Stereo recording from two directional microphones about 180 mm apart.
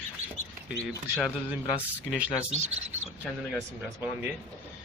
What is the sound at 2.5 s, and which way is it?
Speech, 40° right (ahead or behind).